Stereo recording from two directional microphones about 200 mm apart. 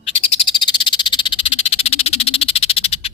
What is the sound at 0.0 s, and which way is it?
Frog, 25° left (ahead or behind).